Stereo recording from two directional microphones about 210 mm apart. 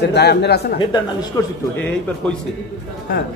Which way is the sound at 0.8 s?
20° left (ahead or behind).